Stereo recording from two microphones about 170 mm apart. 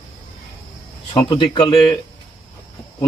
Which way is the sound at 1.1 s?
25° left (ahead or behind).